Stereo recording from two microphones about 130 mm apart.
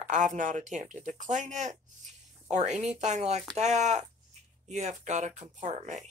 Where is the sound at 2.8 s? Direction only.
60° right (ahead or behind).